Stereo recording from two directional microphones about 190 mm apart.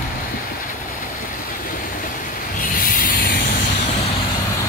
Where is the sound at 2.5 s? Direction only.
45° left (ahead or behind).